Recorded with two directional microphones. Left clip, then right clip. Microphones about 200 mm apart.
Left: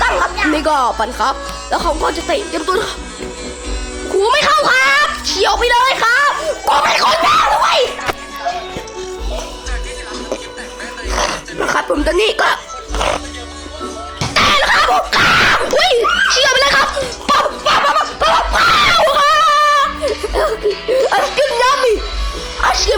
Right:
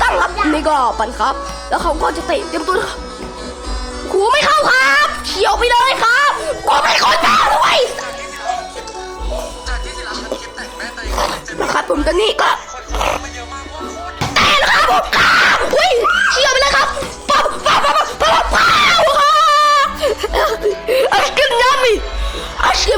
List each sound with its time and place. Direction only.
0.5 s speech: 10° left (ahead or behind)
4.1 s speech: centre (ahead or behind)
7.1 s speech: centre (ahead or behind)
11.1 s speech: 5° left (ahead or behind)
14.3 s speech: centre (ahead or behind); by 16.8 s 25° left (ahead or behind)
17.6 s dog: 15° right (ahead or behind)
18.6 s speech: centre (ahead or behind)